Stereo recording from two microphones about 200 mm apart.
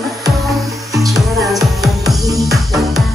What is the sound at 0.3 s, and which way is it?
Music, centre (ahead or behind).